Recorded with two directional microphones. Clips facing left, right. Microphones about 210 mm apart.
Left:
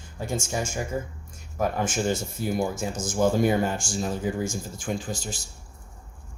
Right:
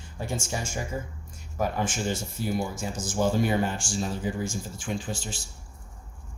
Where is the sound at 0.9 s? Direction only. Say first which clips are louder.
Left 3 dB; 45° left (ahead or behind).